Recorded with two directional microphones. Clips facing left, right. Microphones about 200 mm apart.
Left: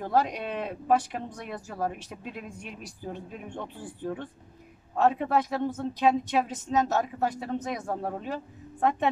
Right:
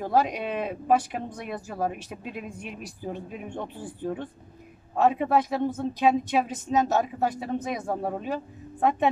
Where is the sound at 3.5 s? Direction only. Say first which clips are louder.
Right 2 dB; 15° right (ahead or behind).